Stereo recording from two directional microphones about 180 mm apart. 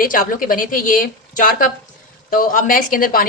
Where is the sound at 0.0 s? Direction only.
50° left (ahead or behind).